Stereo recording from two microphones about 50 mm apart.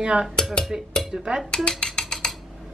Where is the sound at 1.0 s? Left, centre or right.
Centre.